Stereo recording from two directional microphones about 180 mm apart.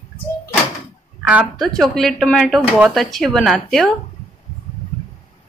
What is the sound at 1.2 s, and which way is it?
Speech, 5° right (ahead or behind).